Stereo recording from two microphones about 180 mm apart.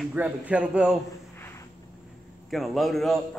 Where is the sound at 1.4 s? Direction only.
15° left (ahead or behind).